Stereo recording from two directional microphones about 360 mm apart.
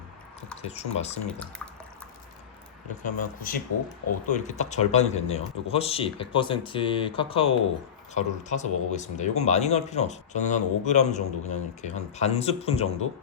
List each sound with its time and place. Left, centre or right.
0.6 s speech: centre
3.0 s speech: left